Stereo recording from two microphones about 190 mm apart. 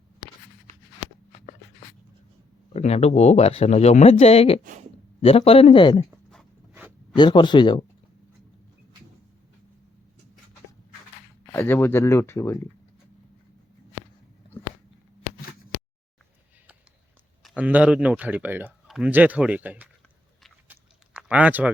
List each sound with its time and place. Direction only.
2.7 s speech: 35° left (ahead or behind)
6.7 s a sound: 5° right (ahead or behind)
7.2 s speech: 25° left (ahead or behind)
11.5 s speech: 10° left (ahead or behind)
17.4 s speech: 5° right (ahead or behind)
20.7 s a sound: 5° right (ahead or behind)